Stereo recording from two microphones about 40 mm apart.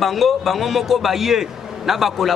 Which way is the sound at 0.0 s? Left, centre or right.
Centre.